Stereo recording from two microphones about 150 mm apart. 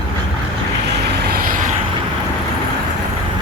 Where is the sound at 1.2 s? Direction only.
80° right.